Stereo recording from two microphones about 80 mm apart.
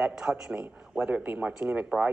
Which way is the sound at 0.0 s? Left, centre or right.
Centre.